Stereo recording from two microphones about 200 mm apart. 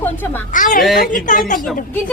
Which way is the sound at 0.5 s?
40° left (ahead or behind).